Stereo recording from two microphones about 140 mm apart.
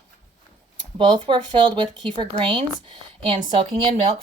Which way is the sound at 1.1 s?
35° right (ahead or behind).